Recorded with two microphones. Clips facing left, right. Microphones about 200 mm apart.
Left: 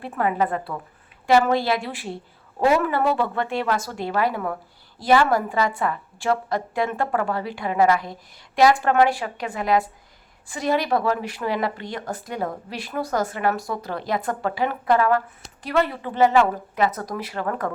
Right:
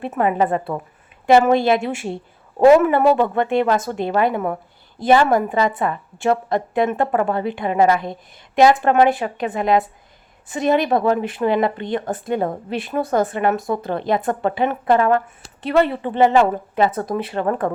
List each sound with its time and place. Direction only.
0.0 s speech: 20° right (ahead or behind)